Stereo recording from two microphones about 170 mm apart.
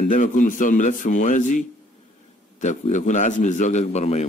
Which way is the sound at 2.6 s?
45° left (ahead or behind).